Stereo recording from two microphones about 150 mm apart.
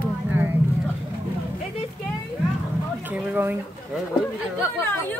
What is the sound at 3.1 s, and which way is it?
Speech, 10° right (ahead or behind).